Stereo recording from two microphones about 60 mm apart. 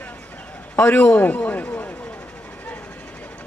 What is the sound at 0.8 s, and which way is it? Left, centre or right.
Speech, left.